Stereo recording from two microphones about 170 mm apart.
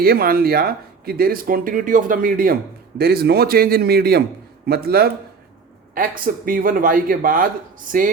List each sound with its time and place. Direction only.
0.0 s speech: 60° right (ahead or behind)